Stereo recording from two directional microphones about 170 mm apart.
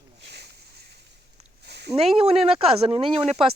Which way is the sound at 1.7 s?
80° right.